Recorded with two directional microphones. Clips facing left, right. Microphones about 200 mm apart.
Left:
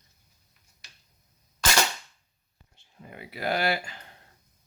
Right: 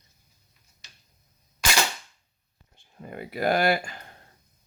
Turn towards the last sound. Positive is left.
turn(degrees=-50)  # may be behind; listen again after turning